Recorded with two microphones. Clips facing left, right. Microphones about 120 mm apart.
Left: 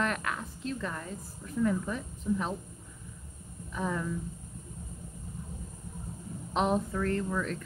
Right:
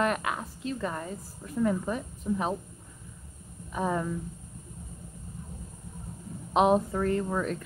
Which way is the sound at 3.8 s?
30° right (ahead or behind).